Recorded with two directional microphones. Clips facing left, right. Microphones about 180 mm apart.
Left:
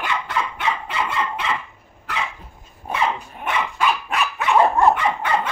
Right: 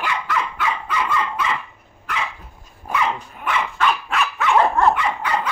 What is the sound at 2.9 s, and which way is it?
Dog, 25° left (ahead or behind).